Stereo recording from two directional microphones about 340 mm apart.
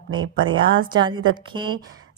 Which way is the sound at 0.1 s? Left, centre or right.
Right.